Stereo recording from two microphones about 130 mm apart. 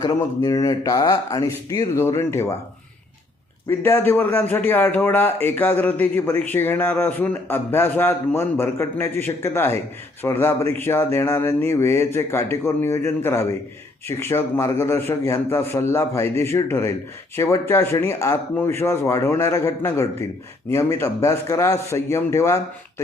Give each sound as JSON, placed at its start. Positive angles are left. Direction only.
{"t": 0.0, "sound": "a man's voice", "side_deg": 30}
{"t": 3.7, "sound": "a man's voice", "side_deg": 15}